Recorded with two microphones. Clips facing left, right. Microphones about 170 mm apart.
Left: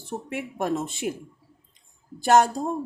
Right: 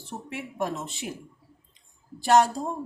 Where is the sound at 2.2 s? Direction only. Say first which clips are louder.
Left 2 dB; 50° left (ahead or behind).